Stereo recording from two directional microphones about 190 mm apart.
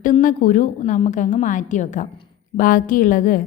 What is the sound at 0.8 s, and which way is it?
A woman's voice, 35° left (ahead or behind).